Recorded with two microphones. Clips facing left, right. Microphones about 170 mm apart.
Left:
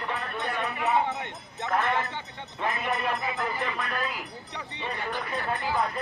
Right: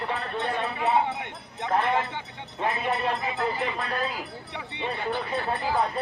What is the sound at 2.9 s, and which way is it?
Speech, 35° right (ahead or behind).